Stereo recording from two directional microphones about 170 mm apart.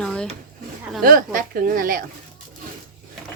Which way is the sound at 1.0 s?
55° right (ahead or behind).